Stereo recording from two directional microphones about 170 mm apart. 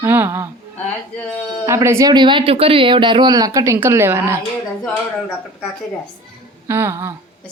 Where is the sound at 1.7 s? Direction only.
15° right (ahead or behind).